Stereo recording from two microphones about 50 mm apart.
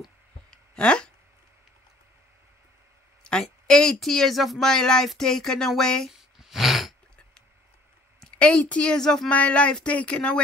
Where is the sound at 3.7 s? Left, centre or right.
Centre.